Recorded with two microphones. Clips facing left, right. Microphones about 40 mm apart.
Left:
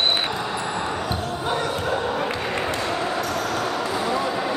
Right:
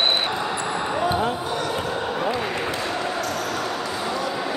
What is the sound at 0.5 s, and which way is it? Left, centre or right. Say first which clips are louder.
Basketball bounce: right 1 dB; centre.